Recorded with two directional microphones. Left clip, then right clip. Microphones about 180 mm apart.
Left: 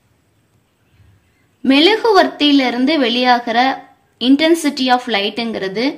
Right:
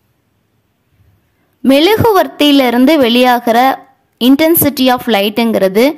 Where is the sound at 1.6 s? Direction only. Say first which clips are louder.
Right 4 dB; 40° right (ahead or behind).